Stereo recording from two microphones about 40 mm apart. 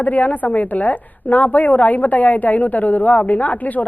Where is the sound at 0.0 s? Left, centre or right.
Left.